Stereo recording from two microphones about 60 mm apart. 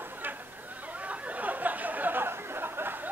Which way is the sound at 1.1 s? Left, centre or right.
Right.